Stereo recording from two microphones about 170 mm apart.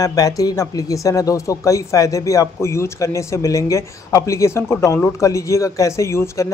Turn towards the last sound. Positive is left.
turn(degrees=15)  # may be behind; listen again after turning